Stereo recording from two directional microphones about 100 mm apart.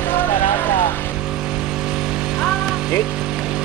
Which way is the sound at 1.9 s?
5° right (ahead or behind).